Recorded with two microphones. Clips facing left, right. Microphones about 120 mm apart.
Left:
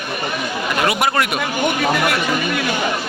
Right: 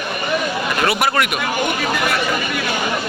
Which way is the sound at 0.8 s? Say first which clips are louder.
Even; 20° left (ahead or behind).